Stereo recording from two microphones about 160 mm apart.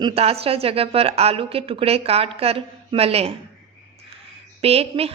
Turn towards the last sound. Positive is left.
turn(degrees=-40)  # may be behind; listen again after turning